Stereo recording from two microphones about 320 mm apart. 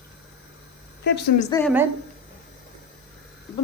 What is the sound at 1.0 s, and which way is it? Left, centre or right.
Speech, left.